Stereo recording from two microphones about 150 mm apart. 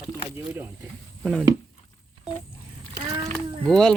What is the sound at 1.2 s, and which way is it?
Speech, centre (ahead or behind).